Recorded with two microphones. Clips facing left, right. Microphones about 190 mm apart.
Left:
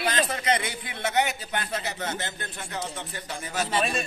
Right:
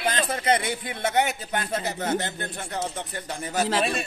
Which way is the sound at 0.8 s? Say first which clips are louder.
Right 1 dB; 45° right (ahead or behind).